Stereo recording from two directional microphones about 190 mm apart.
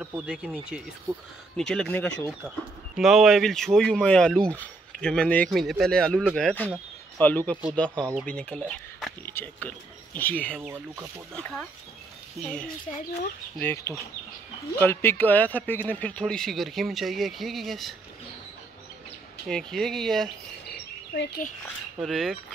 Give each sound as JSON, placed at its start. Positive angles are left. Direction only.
{"t": 0.0, "sound": "speech", "side_deg": -5}
{"t": 2.4, "sound": "speech", "side_deg": -10}
{"t": 3.0, "sound": "speech", "side_deg": 0}
{"t": 12.9, "sound": "speech", "side_deg": 35}
{"t": 13.6, "sound": "speech", "side_deg": 10}
{"t": 19.4, "sound": "speech", "side_deg": 0}
{"t": 21.1, "sound": "a child's voice", "side_deg": 55}
{"t": 21.6, "sound": "speech", "side_deg": 0}